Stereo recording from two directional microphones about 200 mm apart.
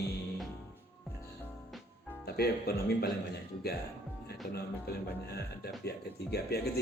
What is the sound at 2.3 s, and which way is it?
Speech, 50° left (ahead or behind).